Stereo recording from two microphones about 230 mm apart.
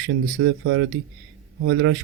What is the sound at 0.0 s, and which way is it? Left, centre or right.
Speech, right.